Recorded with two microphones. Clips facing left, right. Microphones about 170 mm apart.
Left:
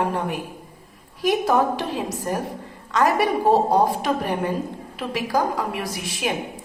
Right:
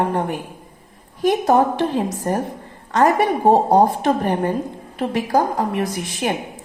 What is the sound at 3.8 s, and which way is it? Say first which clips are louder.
A woman's voice: right 4 dB; 55° right (ahead or behind).